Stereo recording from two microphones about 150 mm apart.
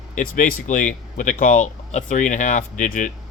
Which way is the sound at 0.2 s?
65° left (ahead or behind).